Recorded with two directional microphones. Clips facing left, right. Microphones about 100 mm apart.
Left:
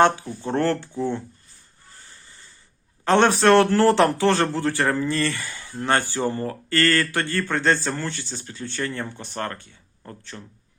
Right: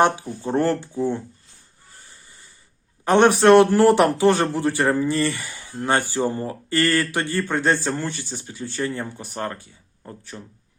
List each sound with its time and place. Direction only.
0.4 s a man's voice: 15° right (ahead or behind)
2.0 s snort: 15° right (ahead or behind)
3.0 s a man's voice: 15° right (ahead or behind)